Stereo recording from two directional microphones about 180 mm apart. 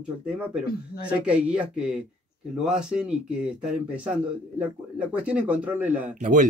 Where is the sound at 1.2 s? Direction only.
5° right (ahead or behind).